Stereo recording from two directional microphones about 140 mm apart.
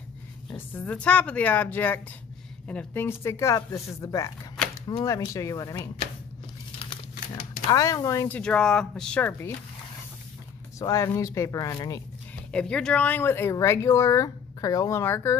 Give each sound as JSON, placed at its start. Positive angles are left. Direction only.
{"t": 0.6, "sound": "speech", "side_deg": 10}
{"t": 7.6, "sound": "speech", "side_deg": 25}
{"t": 8.4, "sound": "speech", "side_deg": 5}
{"t": 10.8, "sound": "speech", "side_deg": 25}
{"t": 12.4, "sound": "speech", "side_deg": 5}